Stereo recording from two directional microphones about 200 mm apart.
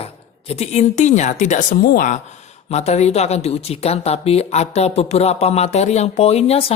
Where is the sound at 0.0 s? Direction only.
30° left (ahead or behind).